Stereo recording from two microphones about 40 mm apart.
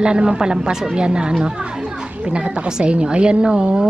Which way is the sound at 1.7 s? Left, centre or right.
Centre.